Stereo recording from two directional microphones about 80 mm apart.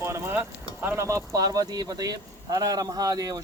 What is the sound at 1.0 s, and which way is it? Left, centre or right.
Speech, right.